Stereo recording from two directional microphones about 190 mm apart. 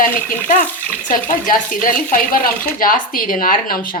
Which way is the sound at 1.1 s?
45° left (ahead or behind).